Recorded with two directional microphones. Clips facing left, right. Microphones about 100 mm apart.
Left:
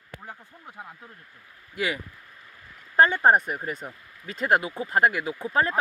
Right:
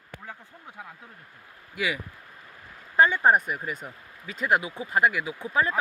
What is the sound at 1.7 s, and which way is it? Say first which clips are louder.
Speech: left 1 dB; 45° left (ahead or behind).